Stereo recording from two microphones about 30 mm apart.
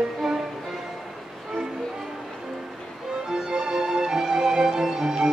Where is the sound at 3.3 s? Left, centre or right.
Right.